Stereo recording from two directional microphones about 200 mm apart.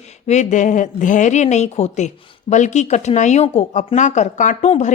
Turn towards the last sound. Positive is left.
turn(degrees=35)  # may be behind; listen again after turning